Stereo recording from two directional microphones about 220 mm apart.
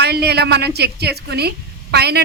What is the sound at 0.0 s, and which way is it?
A woman's voice, 50° right (ahead or behind).